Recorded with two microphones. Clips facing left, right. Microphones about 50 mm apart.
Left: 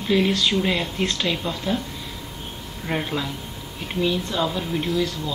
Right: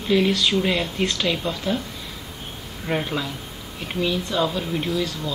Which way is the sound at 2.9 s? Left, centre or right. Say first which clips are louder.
Right 1 dB; centre.